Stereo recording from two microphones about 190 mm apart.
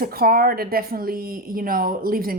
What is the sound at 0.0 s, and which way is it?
A woman's voice, 50° right (ahead or behind).